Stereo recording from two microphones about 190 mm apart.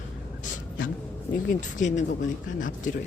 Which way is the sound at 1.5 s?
40° left (ahead or behind).